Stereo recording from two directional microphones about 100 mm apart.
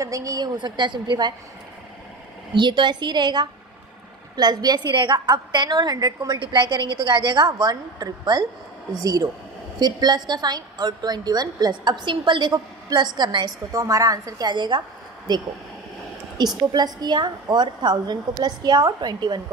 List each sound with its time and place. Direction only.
0.0 s a woman's voice: 35° right (ahead or behind)
0.6 s a woman's voice: 50° right (ahead or behind)
2.5 s a woman's voice: 50° right (ahead or behind)
13.7 s a woman's voice: 35° right (ahead or behind)
14.5 s a woman's voice: 50° right (ahead or behind)